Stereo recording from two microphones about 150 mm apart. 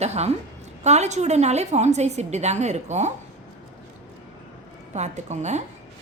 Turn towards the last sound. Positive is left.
turn(degrees=-50)  # may be behind; listen again after turning